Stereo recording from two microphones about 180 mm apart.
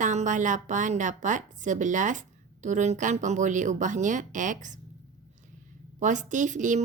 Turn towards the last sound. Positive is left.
turn(degrees=-45)  # may be behind; listen again after turning